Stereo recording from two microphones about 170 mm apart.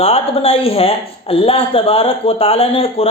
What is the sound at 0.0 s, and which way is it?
Speech, 35° left (ahead or behind).